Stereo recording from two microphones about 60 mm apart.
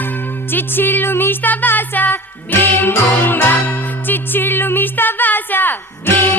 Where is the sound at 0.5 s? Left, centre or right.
Left.